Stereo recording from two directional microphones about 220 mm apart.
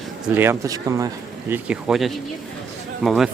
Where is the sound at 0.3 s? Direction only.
10° right (ahead or behind).